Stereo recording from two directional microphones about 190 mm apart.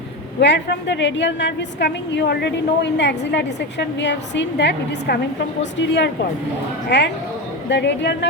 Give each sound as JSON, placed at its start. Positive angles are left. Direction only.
{"t": 0.3, "sound": "a woman's voice", "side_deg": 65}